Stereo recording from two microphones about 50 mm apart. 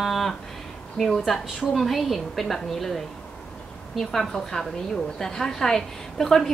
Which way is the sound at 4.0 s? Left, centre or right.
Centre.